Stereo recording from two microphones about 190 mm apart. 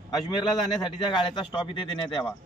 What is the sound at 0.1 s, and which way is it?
A man's voice, 20° left (ahead or behind).